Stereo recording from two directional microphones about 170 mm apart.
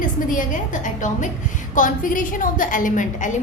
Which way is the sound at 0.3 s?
50° left (ahead or behind).